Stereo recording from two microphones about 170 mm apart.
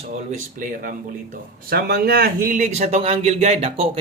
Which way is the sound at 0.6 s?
55° right (ahead or behind).